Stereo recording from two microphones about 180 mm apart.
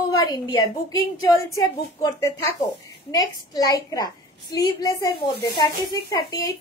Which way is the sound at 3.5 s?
20° left (ahead or behind).